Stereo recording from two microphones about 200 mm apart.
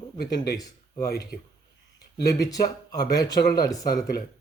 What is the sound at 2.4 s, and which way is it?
Speech, 20° left (ahead or behind).